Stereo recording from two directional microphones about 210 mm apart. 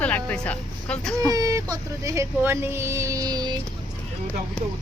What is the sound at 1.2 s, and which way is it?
Speech, 15° right (ahead or behind).